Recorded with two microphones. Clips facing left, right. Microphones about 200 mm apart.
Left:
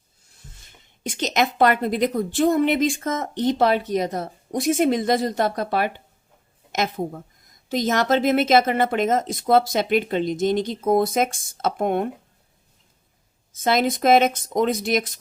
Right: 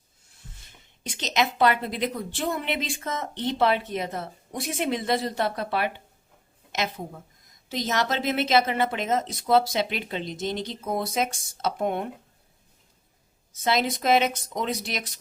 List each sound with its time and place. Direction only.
1.0 s a woman's voice: 50° left (ahead or behind)
13.7 s a woman's voice: 50° left (ahead or behind)